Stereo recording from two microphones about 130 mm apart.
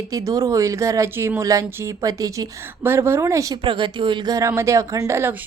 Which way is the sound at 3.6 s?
40° right (ahead or behind).